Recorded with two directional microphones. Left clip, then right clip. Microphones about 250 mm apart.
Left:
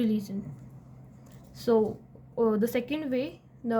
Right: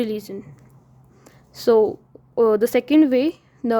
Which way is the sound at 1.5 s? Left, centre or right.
Right.